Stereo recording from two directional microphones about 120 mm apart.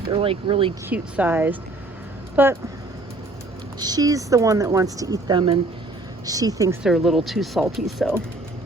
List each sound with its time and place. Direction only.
0.0 s speech: 50° right (ahead or behind)
0.9 s speech: 15° right (ahead or behind)
3.8 s speech: 35° right (ahead or behind)
6.8 s speech: centre (ahead or behind)